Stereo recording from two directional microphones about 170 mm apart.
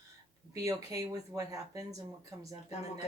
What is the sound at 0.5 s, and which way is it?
Speech, 20° right (ahead or behind).